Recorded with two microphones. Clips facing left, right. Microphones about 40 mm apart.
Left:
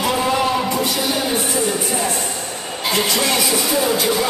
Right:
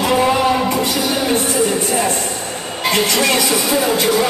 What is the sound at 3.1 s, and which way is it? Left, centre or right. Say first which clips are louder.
Speech: right 3 dB; right.